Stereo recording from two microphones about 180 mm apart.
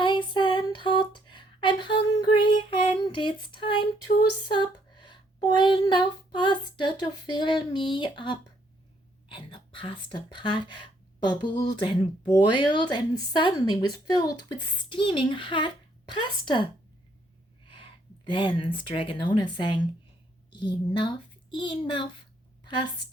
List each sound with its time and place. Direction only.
0.0 s a sound: 25° left (ahead or behind)
4.5 s child singing: 25° left (ahead or behind)
9.3 s a woman's voice: 30° left (ahead or behind)
17.7 s a woman's voice: 30° left (ahead or behind)